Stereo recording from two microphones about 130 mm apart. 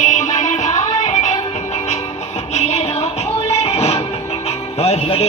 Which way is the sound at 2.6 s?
55° left (ahead or behind).